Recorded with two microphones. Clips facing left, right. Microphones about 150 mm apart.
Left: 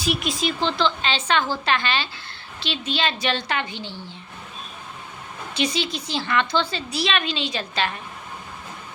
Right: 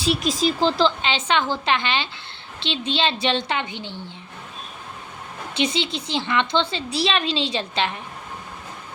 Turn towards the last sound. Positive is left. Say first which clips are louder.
# right 2 dB
turn(degrees=-20)  # may be behind; listen again after turning